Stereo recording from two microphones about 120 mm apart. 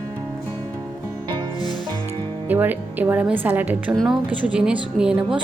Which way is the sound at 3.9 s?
5° right (ahead or behind).